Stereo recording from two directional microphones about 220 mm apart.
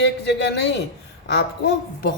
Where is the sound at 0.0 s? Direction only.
50° left (ahead or behind).